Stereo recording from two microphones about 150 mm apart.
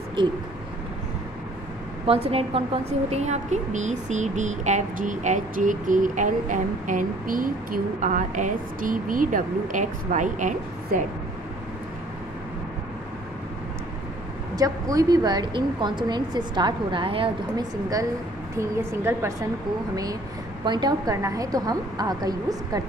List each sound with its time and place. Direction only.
0.2 s speech: 35° right (ahead or behind)
2.0 s a woman's voice: 40° right (ahead or behind); by 11.1 s 60° right (ahead or behind)
14.5 s a woman's voice: 25° right (ahead or behind)
18.6 s a woman's voice: 15° right (ahead or behind)
20.6 s a woman's voice: 30° right (ahead or behind)